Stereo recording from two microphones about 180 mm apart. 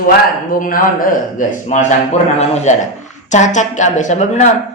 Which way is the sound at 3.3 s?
40° left (ahead or behind).